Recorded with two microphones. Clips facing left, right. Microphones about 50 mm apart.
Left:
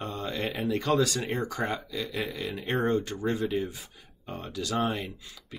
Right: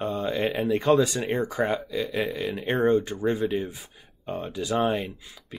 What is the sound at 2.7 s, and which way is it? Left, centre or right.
Speech, centre.